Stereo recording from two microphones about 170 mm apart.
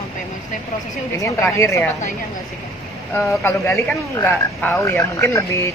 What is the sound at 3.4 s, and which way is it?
A man's voice, 15° left (ahead or behind).